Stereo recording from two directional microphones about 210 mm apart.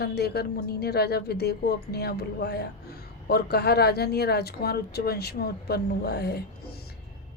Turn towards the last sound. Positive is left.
turn(degrees=50)  # may be behind; listen again after turning